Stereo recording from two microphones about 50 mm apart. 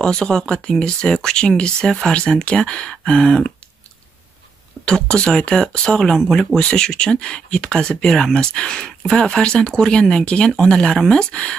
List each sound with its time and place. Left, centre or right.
0.0 s speech: centre
4.8 s speech: centre